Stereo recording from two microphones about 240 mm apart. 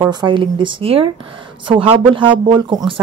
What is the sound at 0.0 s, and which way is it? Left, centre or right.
Speech, centre.